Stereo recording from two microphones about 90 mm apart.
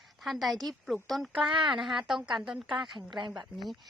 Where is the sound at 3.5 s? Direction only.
Centre (ahead or behind).